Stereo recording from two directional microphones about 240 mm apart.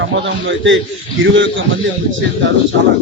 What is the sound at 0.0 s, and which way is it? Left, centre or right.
Speech, right.